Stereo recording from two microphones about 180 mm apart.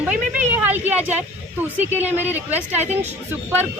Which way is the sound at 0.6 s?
10° right (ahead or behind).